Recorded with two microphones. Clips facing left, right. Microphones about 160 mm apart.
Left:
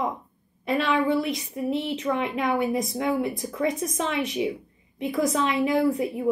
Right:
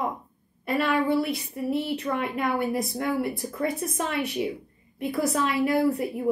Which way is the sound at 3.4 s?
5° right (ahead or behind).